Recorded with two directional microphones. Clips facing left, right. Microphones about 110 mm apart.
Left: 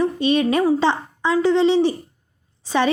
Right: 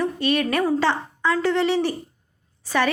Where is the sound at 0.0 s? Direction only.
20° left (ahead or behind).